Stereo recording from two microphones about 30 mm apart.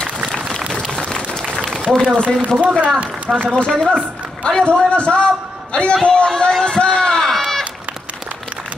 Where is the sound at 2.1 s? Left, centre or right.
Right.